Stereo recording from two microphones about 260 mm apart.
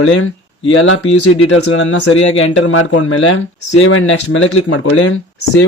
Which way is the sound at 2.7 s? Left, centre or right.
Left.